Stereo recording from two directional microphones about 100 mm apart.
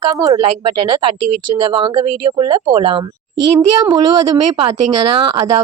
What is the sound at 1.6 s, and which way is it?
Speech, 55° right (ahead or behind).